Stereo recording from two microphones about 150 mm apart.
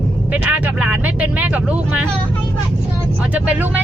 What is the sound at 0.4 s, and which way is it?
Speech, 10° right (ahead or behind).